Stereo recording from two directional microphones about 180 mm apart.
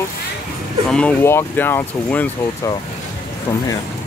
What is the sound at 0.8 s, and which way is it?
Speech, 5° left (ahead or behind).